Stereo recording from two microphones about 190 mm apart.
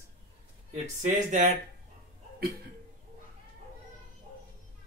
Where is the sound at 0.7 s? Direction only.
40° right (ahead or behind).